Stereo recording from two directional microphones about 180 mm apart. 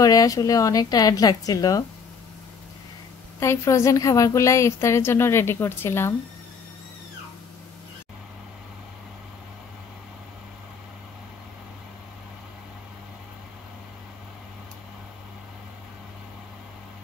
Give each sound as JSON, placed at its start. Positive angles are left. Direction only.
{"t": 0.0, "sound": "a woman's voice", "side_deg": 20}
{"t": 3.3, "sound": "a woman's voice", "side_deg": 15}